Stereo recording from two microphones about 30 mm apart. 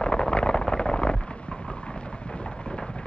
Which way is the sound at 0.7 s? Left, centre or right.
Left.